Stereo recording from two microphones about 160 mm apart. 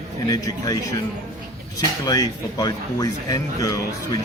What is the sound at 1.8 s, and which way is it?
Speech, 25° left (ahead or behind).